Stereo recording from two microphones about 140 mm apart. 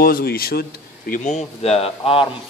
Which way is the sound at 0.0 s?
90° left.